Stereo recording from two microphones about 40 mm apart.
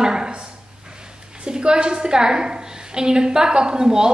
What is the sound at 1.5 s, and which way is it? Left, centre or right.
A woman's voice, right.